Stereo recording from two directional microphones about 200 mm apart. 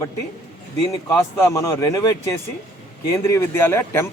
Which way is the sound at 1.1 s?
15° left (ahead or behind).